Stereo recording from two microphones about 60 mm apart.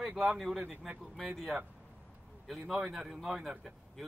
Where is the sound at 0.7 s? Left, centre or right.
Right.